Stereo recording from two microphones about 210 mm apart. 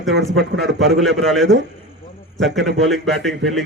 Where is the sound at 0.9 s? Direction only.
Centre (ahead or behind).